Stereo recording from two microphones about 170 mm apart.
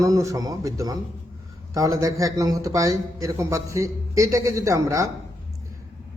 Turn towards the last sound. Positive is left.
turn(degrees=-20)  # may be behind; listen again after turning